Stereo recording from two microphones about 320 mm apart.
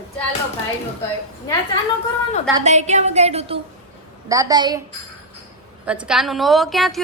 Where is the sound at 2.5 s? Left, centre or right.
Right.